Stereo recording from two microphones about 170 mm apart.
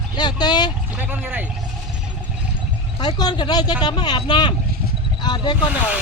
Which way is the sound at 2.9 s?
25° left (ahead or behind).